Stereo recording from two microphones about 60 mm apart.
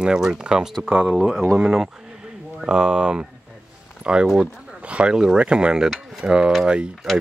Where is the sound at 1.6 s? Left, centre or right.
Centre.